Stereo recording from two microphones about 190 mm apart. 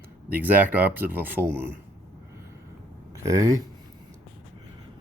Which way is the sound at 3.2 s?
15° right (ahead or behind).